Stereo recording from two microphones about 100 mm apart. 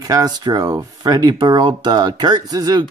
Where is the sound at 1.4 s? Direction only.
45° right (ahead or behind).